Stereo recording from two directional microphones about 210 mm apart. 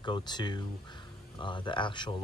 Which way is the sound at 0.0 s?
20° left (ahead or behind).